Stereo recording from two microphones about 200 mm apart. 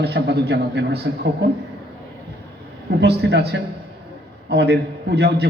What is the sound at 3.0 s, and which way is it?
A man's voice, 55° right (ahead or behind).